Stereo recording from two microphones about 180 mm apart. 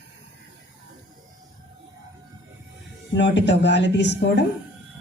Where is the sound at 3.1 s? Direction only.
75° left (ahead or behind).